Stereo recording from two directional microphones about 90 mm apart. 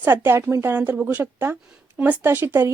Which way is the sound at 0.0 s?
25° right (ahead or behind).